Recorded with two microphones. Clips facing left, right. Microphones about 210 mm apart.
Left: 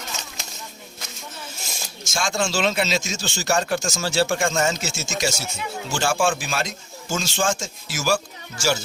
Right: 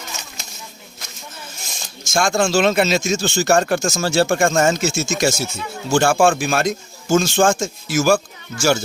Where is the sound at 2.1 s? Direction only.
50° right (ahead or behind).